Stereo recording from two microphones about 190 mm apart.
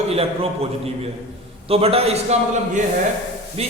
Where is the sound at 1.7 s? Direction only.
30° right (ahead or behind).